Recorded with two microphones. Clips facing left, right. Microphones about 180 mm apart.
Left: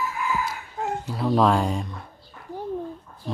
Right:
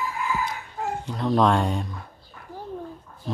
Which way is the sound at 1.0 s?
5° left (ahead or behind).